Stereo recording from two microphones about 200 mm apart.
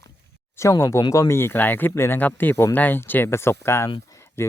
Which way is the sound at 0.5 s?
15° left (ahead or behind).